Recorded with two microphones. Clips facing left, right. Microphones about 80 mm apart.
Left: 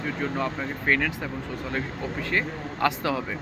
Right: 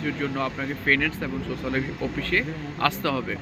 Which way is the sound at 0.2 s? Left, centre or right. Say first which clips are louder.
Right 1 dB; centre.